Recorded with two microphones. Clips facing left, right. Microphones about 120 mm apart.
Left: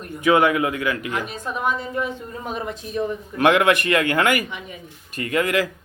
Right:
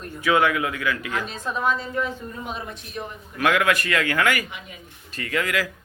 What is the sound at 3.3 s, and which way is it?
Speech, 25° left (ahead or behind).